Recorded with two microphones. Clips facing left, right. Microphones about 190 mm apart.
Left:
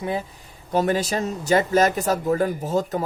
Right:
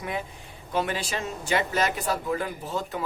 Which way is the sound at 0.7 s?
40° left (ahead or behind).